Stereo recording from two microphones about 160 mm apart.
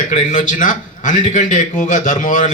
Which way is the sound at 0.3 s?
55° left (ahead or behind).